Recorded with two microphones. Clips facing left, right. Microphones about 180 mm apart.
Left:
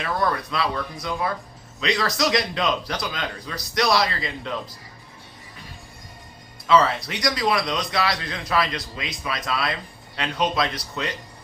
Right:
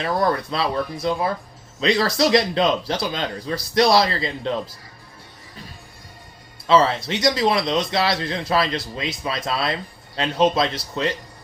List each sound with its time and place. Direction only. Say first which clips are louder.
0.0 s a man's voice: right 4 dB; 30° right (ahead or behind)
6.7 s a man's voice: right 2 dB; 30° right (ahead or behind)